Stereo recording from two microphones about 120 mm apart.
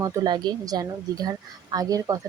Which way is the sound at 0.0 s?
30° right (ahead or behind).